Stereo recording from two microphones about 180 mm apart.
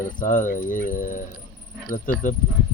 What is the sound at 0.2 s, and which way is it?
Speech, 50° left (ahead or behind).